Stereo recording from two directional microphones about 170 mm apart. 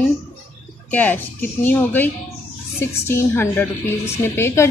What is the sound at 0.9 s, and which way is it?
A woman's voice, 10° left (ahead or behind).